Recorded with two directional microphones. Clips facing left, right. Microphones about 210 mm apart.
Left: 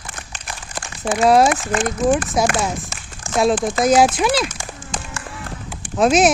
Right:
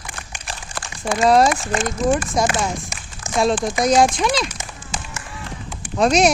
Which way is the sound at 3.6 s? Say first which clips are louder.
Left 1 dB; 5° left (ahead or behind).